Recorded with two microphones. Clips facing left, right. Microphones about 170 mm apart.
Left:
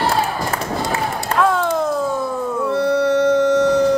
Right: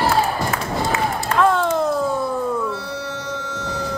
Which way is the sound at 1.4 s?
Centre (ahead or behind).